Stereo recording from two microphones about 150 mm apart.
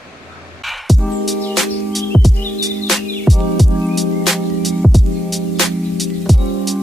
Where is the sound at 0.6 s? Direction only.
Centre (ahead or behind).